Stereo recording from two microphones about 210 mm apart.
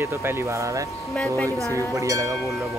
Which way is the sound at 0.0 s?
10° right (ahead or behind).